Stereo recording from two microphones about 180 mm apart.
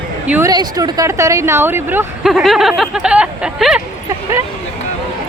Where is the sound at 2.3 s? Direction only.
Centre (ahead or behind).